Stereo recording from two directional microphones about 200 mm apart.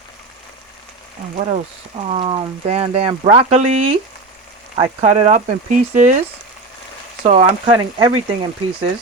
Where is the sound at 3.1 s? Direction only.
20° right (ahead or behind).